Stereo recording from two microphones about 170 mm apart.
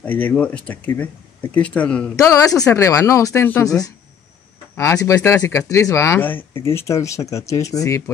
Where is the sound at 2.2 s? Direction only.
20° left (ahead or behind).